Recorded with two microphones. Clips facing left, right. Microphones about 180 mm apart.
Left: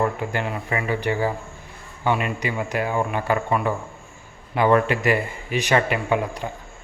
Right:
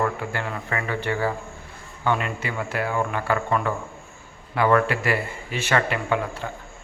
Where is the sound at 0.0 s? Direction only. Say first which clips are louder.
Left 2 dB; 20° left (ahead or behind).